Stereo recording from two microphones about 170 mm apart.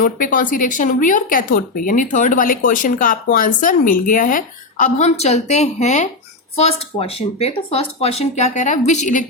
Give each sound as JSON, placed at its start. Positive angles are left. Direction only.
{"t": 0.0, "sound": "speech", "side_deg": 55}